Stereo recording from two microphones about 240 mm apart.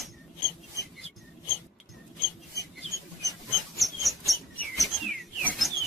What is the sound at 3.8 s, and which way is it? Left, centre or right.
Chirp, centre.